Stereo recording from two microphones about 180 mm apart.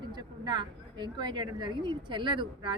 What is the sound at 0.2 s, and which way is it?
Speech, 25° right (ahead or behind).